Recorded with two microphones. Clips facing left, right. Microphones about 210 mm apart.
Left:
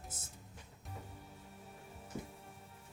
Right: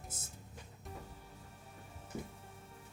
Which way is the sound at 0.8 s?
Centre (ahead or behind).